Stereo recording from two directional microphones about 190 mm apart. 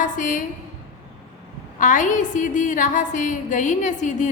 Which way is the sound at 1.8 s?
40° left (ahead or behind).